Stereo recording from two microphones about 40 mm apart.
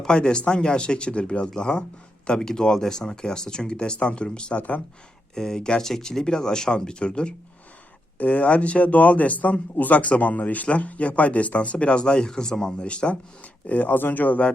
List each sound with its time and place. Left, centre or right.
0.0 s speech: left
4.5 s speech: left
5.3 s speech: centre
8.2 s speech: left; by 12.9 s centre
12.9 s speech: left
13.7 s speech: left